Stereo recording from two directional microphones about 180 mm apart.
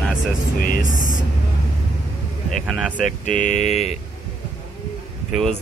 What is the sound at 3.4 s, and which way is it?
Speech, 45° left (ahead or behind).